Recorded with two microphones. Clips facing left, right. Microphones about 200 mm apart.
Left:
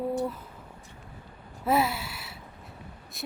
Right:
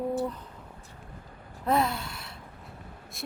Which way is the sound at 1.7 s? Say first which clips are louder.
Left 1 dB; 5° left (ahead or behind).